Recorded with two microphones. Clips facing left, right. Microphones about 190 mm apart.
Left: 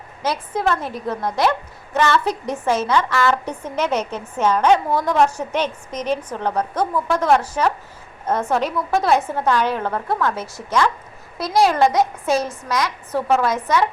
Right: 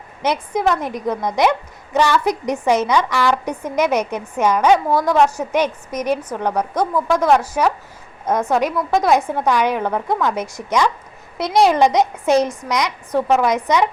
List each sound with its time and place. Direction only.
0.2 s a woman's voice: 15° right (ahead or behind)